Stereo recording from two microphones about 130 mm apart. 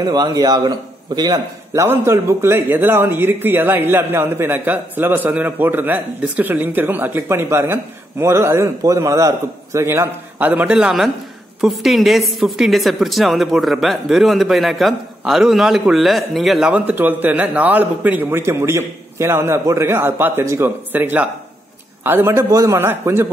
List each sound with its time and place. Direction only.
0.0 s a man's voice: 30° right (ahead or behind)